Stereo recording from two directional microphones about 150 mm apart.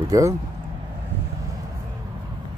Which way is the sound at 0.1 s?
20° right (ahead or behind).